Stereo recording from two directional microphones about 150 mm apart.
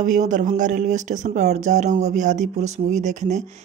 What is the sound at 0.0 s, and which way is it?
Speech, 55° right (ahead or behind).